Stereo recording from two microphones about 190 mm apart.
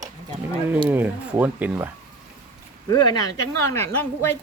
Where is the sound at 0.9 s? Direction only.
10° right (ahead or behind).